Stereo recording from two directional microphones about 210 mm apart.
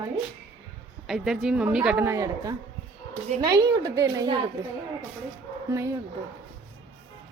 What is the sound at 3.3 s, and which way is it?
Speech, 35° right (ahead or behind).